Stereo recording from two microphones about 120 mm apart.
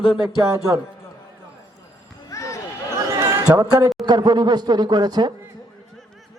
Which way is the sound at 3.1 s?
20° right (ahead or behind).